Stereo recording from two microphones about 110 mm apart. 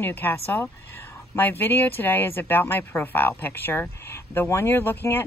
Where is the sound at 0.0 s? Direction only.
20° left (ahead or behind).